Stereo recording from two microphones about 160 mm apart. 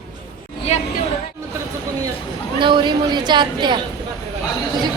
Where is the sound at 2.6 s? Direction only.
30° right (ahead or behind).